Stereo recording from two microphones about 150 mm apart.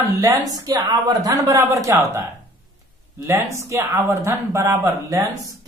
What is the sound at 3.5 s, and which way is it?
Speech, 20° right (ahead or behind).